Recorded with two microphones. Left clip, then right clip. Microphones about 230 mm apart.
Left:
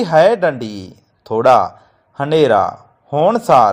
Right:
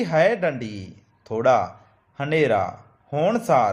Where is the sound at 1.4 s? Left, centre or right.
Left.